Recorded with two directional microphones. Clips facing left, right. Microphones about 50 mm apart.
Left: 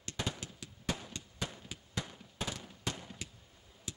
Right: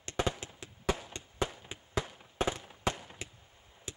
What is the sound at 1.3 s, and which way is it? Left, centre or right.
Fireworks, right.